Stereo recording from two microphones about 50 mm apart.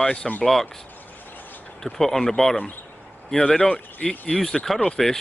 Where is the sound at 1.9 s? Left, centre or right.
Centre.